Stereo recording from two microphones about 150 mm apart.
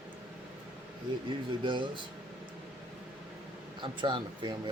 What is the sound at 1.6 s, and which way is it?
Speech, 30° right (ahead or behind).